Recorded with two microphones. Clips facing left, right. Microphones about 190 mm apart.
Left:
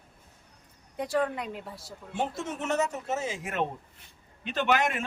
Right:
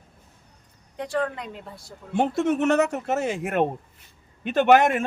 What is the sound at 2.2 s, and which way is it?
A man's voice, 65° right (ahead or behind).